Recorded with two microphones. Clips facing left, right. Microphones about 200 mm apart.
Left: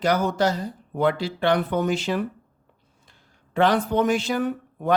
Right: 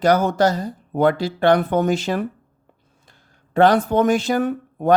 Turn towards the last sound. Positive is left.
turn(degrees=-50)  # may be behind; listen again after turning